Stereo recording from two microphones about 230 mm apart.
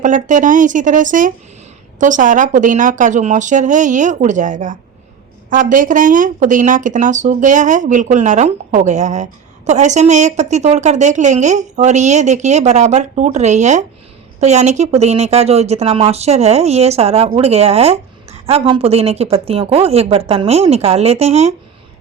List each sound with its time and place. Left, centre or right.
0.0 s a woman's voice: right